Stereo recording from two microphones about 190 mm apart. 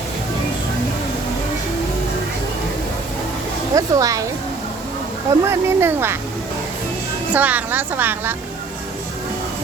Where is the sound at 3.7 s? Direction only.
15° right (ahead or behind).